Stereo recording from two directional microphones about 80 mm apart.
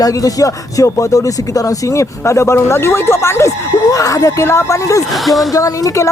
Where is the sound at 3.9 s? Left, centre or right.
Left.